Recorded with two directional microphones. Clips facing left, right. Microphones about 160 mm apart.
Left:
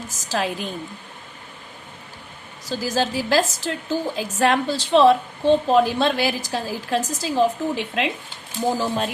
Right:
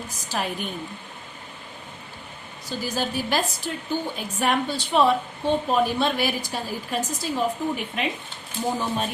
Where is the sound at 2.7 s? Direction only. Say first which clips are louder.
Left 4 dB; 90° left.